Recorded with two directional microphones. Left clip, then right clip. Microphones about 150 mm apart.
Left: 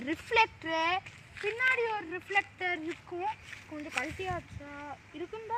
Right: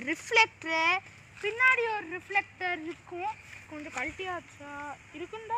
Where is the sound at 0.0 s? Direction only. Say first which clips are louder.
Right 3 dB; 25° left (ahead or behind); by 2.8 s 5° left (ahead or behind).